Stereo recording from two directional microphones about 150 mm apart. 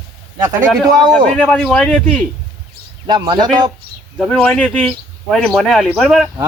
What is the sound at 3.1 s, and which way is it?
Speech, 25° right (ahead or behind).